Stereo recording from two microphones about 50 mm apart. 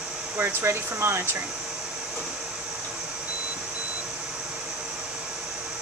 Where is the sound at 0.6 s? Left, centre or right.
Right.